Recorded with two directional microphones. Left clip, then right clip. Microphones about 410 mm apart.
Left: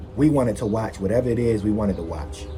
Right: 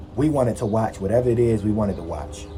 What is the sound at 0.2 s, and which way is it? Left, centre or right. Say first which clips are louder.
A man's voice: left 1 dB; centre.